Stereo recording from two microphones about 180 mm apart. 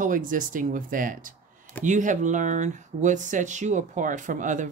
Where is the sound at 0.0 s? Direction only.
50° right (ahead or behind).